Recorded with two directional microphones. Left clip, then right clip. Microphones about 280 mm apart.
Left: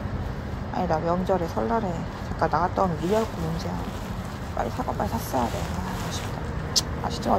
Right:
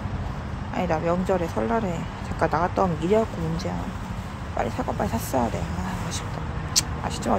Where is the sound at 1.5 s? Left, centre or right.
Right.